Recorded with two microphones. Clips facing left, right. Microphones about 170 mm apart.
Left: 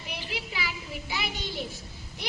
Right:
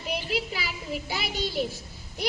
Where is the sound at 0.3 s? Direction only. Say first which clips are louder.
Right 5 dB; 35° right (ahead or behind).